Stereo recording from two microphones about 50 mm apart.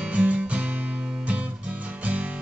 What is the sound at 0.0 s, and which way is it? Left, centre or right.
Music, right.